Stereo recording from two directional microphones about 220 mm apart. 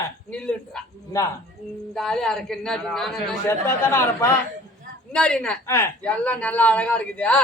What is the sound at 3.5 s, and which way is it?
A man's voice, 15° left (ahead or behind).